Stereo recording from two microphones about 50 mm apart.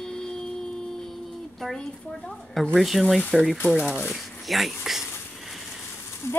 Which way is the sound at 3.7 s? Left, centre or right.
Centre.